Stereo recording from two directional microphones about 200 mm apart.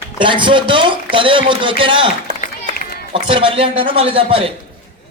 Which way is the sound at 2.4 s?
50° left (ahead or behind).